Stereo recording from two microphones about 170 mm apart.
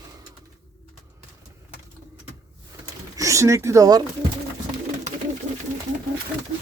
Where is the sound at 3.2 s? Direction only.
20° right (ahead or behind).